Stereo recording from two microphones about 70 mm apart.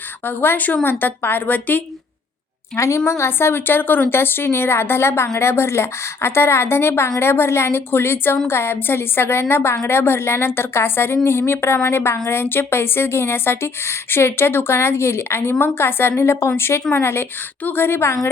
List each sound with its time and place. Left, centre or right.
0.3 s a woman's voice: left
2.7 s a woman's voice: left
3.1 s a woman's voice: left